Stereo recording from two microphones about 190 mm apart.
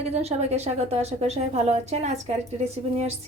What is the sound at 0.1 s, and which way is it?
Speech, 35° right (ahead or behind).